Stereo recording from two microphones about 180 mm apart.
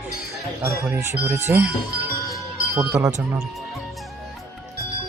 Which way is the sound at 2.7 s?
15° right (ahead or behind).